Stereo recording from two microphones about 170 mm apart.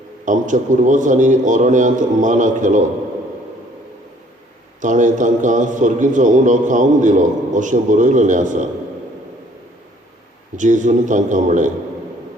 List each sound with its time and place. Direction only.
0.3 s a man's voice: 50° right (ahead or behind)
4.8 s a man's voice: 50° right (ahead or behind)
10.6 s a man's voice: 45° right (ahead or behind)